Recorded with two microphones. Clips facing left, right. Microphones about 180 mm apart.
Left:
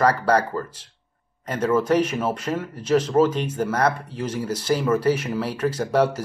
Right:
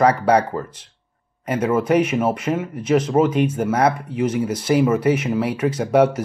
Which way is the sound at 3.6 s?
20° right (ahead or behind).